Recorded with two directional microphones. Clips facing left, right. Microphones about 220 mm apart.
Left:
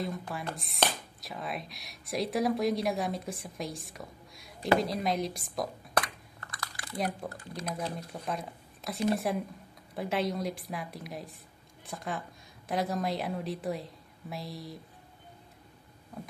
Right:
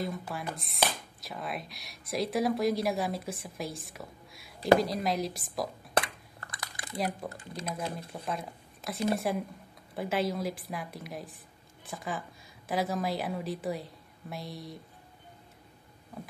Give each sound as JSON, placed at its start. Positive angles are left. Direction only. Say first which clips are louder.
{"t": 0.0, "sound": "speech", "louder": "even", "side_deg": 0}
{"t": 6.5, "sound": "typing", "louder": "even", "side_deg": -20}
{"t": 7.2, "sound": "speech", "louder": "even", "side_deg": -20}
{"t": 8.1, "sound": "speech", "louder": "even", "side_deg": 0}